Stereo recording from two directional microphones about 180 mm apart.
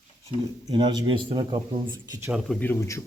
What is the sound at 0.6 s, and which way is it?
Speech, 25° right (ahead or behind).